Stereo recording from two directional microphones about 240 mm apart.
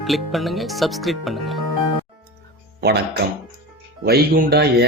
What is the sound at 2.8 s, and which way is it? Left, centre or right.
Speech, right.